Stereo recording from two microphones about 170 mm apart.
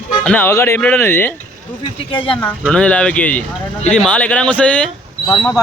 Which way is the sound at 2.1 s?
30° left (ahead or behind).